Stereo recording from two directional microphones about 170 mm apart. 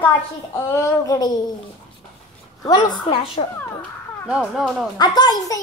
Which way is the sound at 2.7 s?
25° left (ahead or behind).